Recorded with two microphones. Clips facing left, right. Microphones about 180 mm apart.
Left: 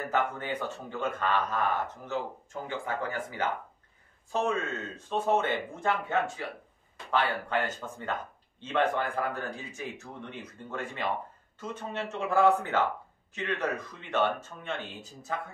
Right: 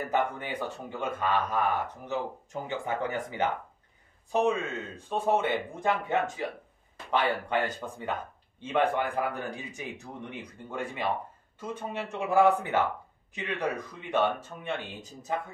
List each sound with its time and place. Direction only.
0.1 s speech: 15° right (ahead or behind)